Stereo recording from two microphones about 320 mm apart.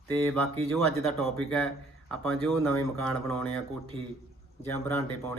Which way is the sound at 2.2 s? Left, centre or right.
Centre.